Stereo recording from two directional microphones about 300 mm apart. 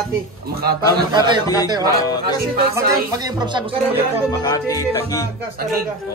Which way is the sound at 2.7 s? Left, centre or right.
Centre.